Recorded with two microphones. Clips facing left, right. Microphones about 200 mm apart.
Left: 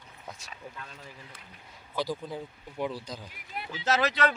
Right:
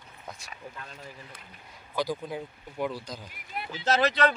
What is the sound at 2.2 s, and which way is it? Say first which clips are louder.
Speech: right 2 dB; 5° right (ahead or behind).